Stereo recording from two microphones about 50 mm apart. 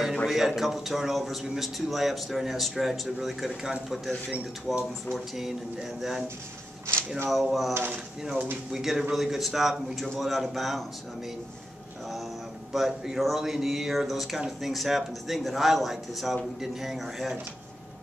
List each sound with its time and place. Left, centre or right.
0.3 s a man's voice: centre
6.9 s a sound: right
7.2 s a man's voice: centre
7.7 s speech: right
8.7 s a man's voice: centre
12.7 s a man's voice: centre